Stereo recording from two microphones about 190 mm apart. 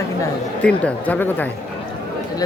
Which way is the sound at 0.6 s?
5° left (ahead or behind).